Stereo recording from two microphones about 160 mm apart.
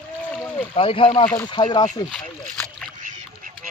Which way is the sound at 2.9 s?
55° right (ahead or behind).